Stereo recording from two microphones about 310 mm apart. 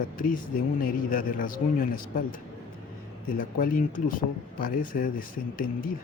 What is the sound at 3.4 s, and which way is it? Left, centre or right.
Speech, left.